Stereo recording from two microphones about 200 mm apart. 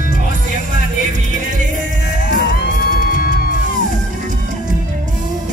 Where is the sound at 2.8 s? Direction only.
45° left (ahead or behind).